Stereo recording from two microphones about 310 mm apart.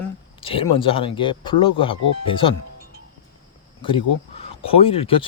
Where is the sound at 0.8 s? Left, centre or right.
Centre.